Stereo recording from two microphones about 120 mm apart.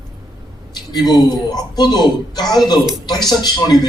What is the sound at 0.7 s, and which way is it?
A man's voice, 35° left (ahead or behind).